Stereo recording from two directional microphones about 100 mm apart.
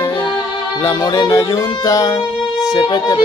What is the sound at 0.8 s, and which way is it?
Music, 30° left (ahead or behind).